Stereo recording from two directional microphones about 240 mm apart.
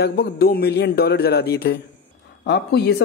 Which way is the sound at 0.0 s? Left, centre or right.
Left.